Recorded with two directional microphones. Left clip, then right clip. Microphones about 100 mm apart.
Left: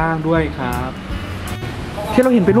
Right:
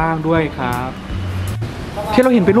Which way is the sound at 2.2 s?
10° right (ahead or behind).